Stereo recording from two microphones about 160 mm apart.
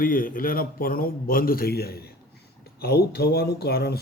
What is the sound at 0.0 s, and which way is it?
Speech, 60° left (ahead or behind).